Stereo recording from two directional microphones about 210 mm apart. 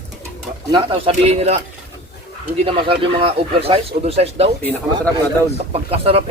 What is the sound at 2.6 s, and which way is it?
Speech, 25° right (ahead or behind).